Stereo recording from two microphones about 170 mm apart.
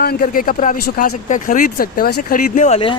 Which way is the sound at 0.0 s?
60° left (ahead or behind).